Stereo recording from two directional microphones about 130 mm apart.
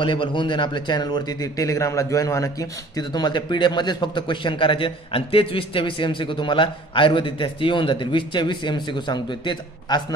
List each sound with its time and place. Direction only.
0.0 s a man's voice: 40° left (ahead or behind)